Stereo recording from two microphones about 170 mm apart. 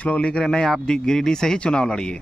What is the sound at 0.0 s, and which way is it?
Speech, 5° left (ahead or behind).